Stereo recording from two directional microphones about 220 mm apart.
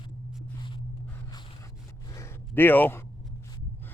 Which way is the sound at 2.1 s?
15° left (ahead or behind).